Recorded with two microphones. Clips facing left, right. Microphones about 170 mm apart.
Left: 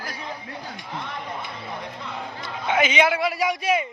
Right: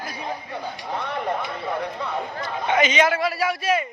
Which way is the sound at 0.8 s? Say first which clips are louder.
Right 8 dB; 60° right (ahead or behind).